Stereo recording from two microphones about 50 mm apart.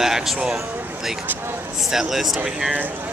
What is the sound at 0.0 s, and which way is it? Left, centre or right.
Speech, centre.